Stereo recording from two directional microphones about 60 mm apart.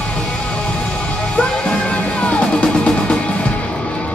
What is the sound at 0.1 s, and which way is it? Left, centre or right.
Music, centre.